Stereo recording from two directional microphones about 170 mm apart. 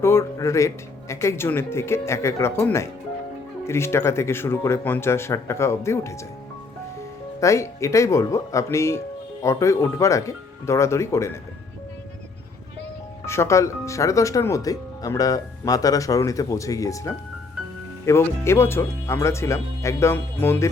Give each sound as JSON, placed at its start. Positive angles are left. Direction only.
{"t": 0.0, "sound": "a man's voice", "side_deg": 15}
{"t": 7.3, "sound": "a man's voice", "side_deg": 15}
{"t": 13.2, "sound": "a man's voice", "side_deg": 15}